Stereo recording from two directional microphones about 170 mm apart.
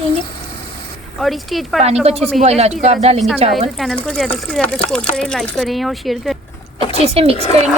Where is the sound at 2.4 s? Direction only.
40° right (ahead or behind).